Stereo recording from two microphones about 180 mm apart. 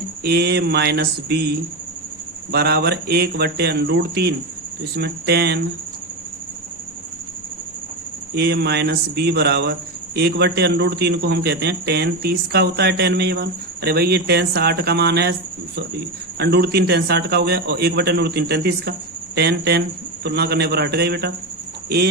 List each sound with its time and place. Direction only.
0.2 s a man's voice: 65° right (ahead or behind)
8.4 s a man's voice: 65° right (ahead or behind)